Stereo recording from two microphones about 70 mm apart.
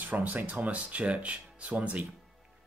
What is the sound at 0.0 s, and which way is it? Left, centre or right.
Speech, right.